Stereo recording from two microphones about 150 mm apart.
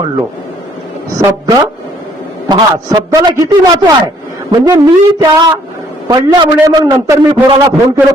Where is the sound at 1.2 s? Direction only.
20° right (ahead or behind).